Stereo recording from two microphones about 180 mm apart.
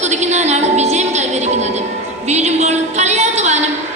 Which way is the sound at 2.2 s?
40° right (ahead or behind).